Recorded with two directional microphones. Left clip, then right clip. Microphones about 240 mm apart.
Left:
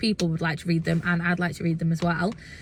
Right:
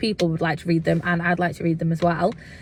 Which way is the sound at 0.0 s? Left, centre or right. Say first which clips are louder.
Right 4 dB; centre.